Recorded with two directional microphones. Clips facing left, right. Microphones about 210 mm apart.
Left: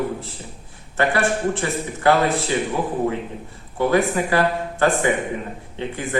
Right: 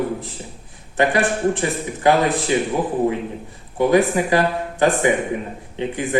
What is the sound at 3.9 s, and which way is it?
A man's voice, 15° right (ahead or behind).